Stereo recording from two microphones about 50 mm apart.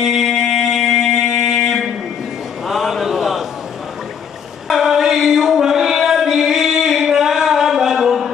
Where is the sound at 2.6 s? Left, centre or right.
Centre.